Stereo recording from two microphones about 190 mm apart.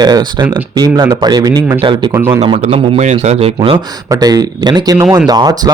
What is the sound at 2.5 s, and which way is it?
A man's voice, 35° right (ahead or behind).